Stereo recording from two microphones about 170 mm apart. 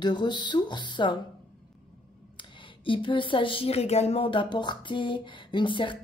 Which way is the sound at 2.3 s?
30° left (ahead or behind).